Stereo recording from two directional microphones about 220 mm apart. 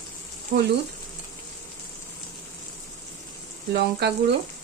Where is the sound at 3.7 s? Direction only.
50° right (ahead or behind).